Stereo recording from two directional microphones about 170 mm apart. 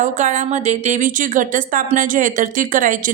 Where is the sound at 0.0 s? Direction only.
45° right (ahead or behind).